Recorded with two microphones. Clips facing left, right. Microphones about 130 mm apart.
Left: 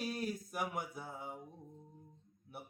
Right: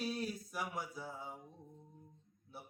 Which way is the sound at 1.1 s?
55° left (ahead or behind).